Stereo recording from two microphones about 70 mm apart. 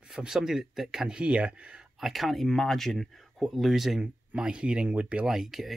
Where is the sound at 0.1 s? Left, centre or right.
Centre.